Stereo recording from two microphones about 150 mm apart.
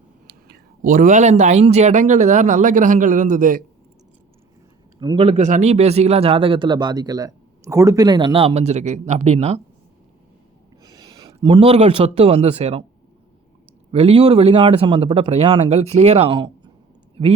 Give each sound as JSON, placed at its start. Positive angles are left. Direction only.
{"t": 0.3, "sound": "speech", "side_deg": -90}
{"t": 4.9, "sound": "speech", "side_deg": -35}
{"t": 5.5, "sound": "speech", "side_deg": -50}
{"t": 10.8, "sound": "speech", "side_deg": -30}
{"t": 13.9, "sound": "speech", "side_deg": -40}